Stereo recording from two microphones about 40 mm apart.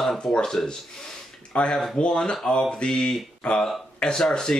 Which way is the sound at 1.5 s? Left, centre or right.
Left.